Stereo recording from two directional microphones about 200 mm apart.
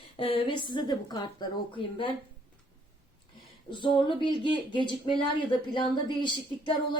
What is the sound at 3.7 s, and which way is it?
A woman's voice, 25° left (ahead or behind).